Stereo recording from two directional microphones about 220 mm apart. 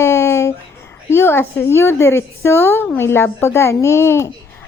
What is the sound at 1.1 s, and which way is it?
A woman's voice, 10° left (ahead or behind).